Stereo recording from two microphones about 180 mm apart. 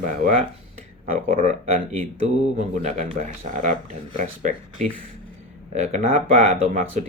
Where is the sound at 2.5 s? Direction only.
40° right (ahead or behind).